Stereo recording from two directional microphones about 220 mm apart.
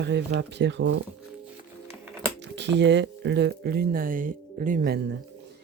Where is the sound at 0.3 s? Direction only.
50° right (ahead or behind).